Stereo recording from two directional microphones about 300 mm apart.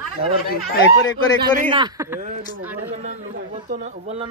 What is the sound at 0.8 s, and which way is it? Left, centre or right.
Speech, left.